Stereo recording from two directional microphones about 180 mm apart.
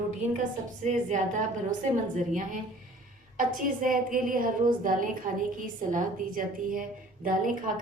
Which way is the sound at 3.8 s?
50° right (ahead or behind).